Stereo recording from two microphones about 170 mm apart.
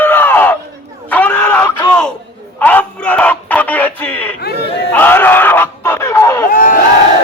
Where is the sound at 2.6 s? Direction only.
10° left (ahead or behind).